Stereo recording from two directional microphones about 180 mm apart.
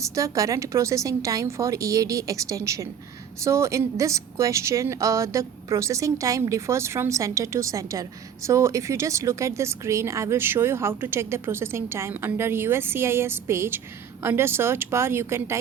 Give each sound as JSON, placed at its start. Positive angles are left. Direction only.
{"t": 0.0, "sound": "speech", "side_deg": -20}